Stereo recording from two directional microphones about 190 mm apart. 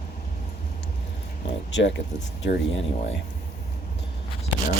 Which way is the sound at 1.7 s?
75° left (ahead or behind).